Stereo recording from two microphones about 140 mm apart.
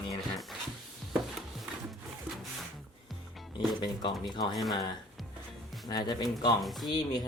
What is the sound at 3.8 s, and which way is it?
Speech, 35° left (ahead or behind).